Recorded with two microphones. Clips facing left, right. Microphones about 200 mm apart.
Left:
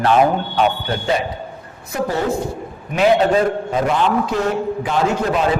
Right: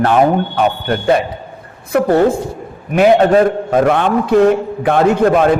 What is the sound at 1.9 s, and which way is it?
Speech, 55° right (ahead or behind).